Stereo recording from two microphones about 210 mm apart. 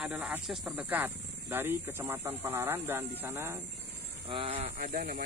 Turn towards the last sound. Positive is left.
turn(degrees=-40)  # may be behind; listen again after turning